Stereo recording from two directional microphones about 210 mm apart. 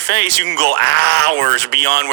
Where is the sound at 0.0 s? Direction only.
55° right (ahead or behind).